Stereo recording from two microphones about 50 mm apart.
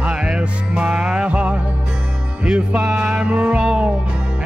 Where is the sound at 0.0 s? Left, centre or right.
Right.